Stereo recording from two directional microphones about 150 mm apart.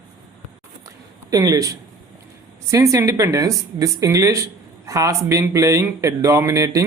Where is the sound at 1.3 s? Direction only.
25° right (ahead or behind).